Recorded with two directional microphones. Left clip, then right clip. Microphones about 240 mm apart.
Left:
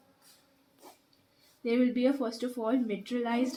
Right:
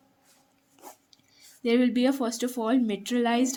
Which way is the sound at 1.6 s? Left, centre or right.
Right.